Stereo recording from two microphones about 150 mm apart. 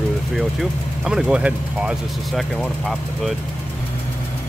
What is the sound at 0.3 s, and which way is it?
Speech, centre (ahead or behind).